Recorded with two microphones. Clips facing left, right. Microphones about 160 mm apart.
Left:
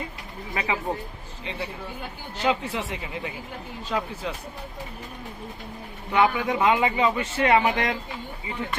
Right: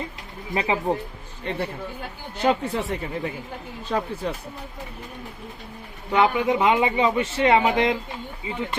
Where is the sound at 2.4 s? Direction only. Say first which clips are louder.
Right 3 dB; 45° right (ahead or behind).